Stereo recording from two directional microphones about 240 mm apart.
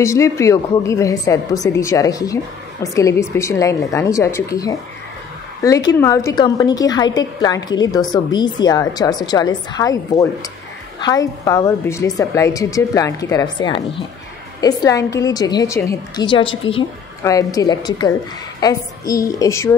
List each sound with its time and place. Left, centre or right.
0.0 s a woman's voice: centre